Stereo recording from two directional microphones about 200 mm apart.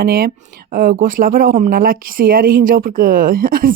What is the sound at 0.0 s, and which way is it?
Speech, 50° right (ahead or behind).